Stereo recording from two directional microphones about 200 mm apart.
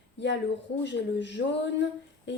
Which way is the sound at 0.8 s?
60° left (ahead or behind).